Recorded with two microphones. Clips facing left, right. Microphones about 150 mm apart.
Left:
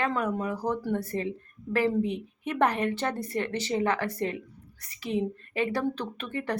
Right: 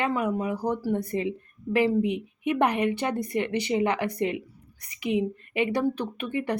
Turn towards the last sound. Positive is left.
turn(degrees=-15)  # may be behind; listen again after turning